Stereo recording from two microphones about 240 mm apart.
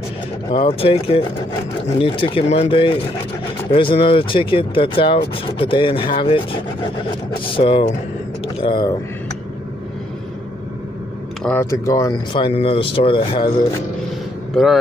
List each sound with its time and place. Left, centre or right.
0.5 s speech: left
7.5 s speech: left
11.4 s speech: centre
14.5 s speech: centre